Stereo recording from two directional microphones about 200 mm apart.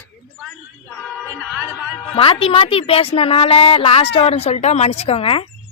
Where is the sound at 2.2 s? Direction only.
25° left (ahead or behind).